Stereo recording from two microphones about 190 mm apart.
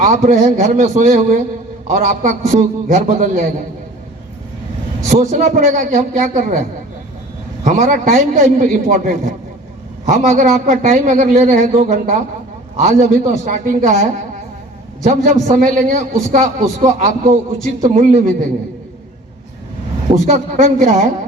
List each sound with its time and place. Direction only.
0.0 s a man's voice: 40° right (ahead or behind)
5.0 s a man's voice: 40° right (ahead or behind)
7.6 s a man's voice: 40° right (ahead or behind)
20.1 s a man's voice: 40° right (ahead or behind)